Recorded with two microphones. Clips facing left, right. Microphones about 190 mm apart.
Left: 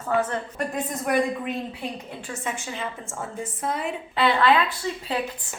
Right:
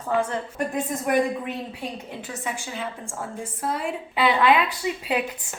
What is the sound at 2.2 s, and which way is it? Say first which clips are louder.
A woman's voice: left 2 dB; centre (ahead or behind).